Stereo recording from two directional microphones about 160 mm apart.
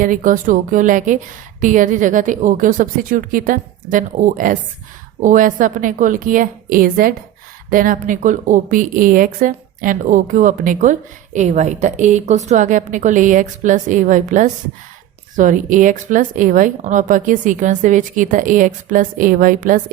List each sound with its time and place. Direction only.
0.0 s a woman's voice: 55° right (ahead or behind)